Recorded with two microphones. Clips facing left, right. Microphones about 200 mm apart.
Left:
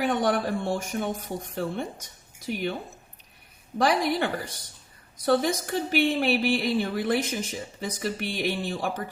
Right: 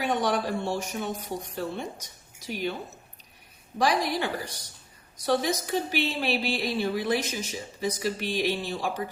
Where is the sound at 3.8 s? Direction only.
55° left (ahead or behind).